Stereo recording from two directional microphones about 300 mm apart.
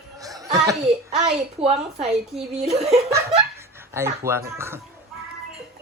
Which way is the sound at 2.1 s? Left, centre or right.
Centre.